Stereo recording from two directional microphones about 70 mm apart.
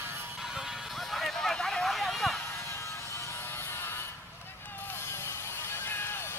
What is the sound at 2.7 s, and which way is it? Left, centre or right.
Music, left.